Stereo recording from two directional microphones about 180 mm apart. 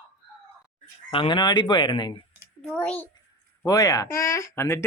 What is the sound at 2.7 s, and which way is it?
Speech, 10° left (ahead or behind).